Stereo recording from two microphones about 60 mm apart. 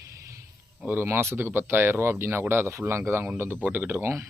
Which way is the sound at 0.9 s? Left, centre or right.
Right.